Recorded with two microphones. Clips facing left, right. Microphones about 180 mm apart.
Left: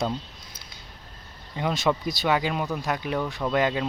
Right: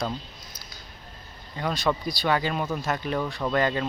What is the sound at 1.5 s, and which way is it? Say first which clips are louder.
Speech: left 2 dB; 20° left (ahead or behind).